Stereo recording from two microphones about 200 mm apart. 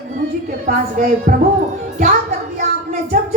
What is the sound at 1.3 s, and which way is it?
Speech, 50° right (ahead or behind).